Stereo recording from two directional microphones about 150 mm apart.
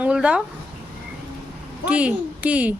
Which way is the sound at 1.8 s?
10° right (ahead or behind).